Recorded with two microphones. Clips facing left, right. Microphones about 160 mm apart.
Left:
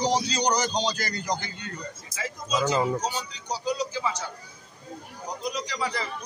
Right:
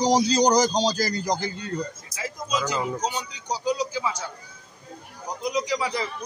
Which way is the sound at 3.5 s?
10° right (ahead or behind).